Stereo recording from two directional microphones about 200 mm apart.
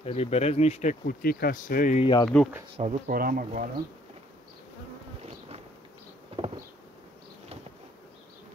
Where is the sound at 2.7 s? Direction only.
35° right (ahead or behind).